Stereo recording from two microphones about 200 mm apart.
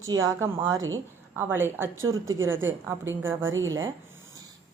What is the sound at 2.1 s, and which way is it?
Speech, 85° right.